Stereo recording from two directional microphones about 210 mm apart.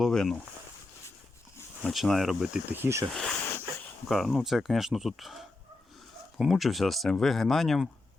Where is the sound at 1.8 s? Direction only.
Centre (ahead or behind).